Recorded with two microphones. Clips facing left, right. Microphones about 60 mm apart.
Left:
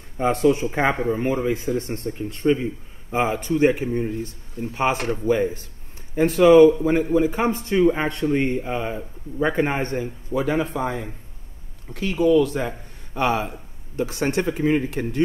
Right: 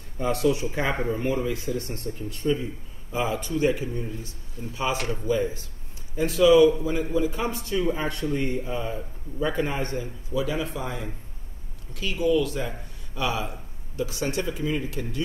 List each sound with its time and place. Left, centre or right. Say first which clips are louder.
0.2 s a man's voice: left 5 dB; left